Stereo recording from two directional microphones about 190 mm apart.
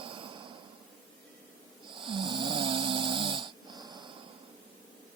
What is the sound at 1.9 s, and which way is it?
Snoring, 25° right (ahead or behind).